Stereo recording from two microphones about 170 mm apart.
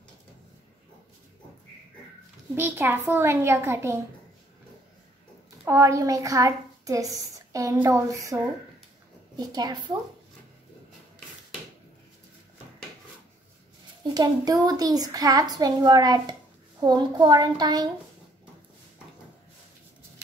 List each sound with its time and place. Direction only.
2.5 s a child's voice: 15° right (ahead or behind)
5.7 s a woman's voice: 20° right (ahead or behind)
14.1 s a woman's voice: 25° right (ahead or behind)